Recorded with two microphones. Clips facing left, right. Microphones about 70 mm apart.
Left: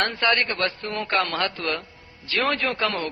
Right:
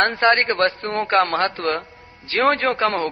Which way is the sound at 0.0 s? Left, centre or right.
Right.